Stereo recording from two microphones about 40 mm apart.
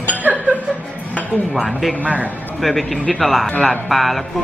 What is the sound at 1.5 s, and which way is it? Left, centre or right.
Speech, centre.